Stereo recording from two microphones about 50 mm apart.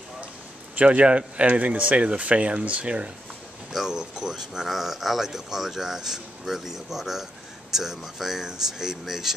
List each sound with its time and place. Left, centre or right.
0.7 s speech: right
3.7 s speech: centre